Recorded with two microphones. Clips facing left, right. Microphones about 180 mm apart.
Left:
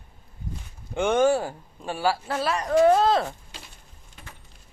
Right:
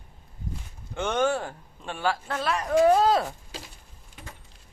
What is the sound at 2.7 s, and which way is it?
Speech, 10° right (ahead or behind).